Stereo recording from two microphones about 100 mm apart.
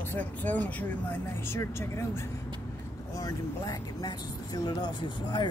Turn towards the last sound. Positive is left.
turn(degrees=45)  # may be behind; listen again after turning